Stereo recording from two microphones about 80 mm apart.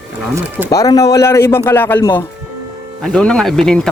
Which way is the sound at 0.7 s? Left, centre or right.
Left.